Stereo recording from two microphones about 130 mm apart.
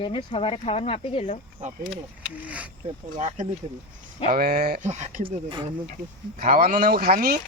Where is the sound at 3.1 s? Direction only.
70° right (ahead or behind).